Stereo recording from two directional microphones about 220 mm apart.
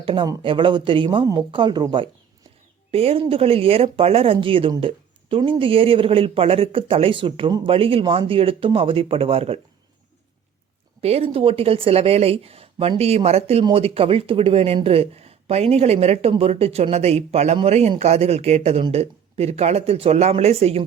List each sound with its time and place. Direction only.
0.0 s speech: 25° right (ahead or behind)
11.0 s speech: 25° right (ahead or behind)